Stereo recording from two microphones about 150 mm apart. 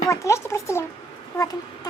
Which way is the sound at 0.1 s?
20° left (ahead or behind).